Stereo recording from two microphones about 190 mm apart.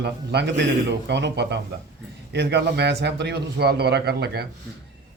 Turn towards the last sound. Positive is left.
turn(degrees=-55)  # may be behind; listen again after turning